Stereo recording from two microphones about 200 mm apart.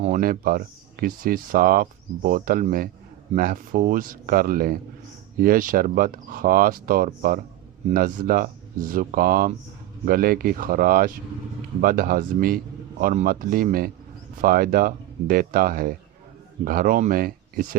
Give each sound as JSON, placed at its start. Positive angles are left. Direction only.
{"t": 0.0, "sound": "speech", "side_deg": -40}